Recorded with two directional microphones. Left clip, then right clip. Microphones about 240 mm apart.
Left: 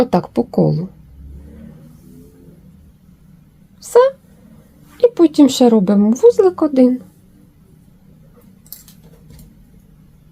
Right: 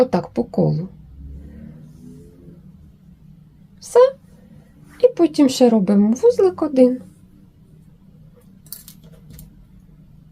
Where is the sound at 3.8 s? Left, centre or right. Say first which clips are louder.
Left 2 dB; left.